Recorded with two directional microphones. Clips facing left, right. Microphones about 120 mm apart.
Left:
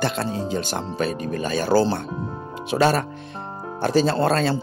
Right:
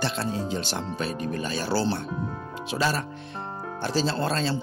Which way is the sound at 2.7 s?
60° left (ahead or behind).